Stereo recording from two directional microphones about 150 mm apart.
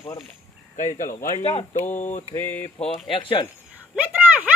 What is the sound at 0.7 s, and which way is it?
Speech, 60° left (ahead or behind).